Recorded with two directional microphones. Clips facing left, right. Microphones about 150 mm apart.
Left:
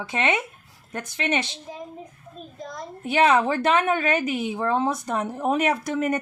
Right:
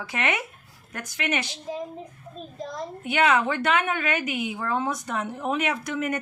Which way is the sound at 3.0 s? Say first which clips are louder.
Left 3 dB; 35° left (ahead or behind).